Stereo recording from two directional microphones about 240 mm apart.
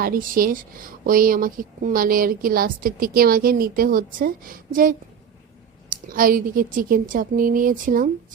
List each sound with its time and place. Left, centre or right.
0.0 s a woman's voice: right